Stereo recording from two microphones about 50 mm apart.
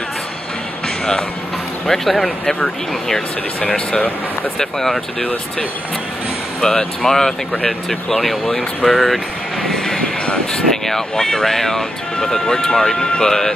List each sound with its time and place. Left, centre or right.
0.8 s music: centre
1.9 s speech: centre
6.6 s speech: centre